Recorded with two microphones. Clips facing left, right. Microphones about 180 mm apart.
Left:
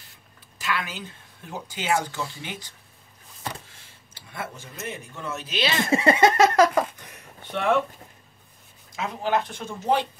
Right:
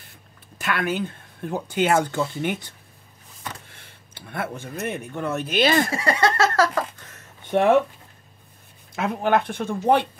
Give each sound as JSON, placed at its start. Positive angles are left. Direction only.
{"t": 0.6, "sound": "speech", "side_deg": -55}
{"t": 5.9, "sound": "a sound", "side_deg": 20}
{"t": 7.5, "sound": "speech", "side_deg": -50}
{"t": 8.9, "sound": "speech", "side_deg": -60}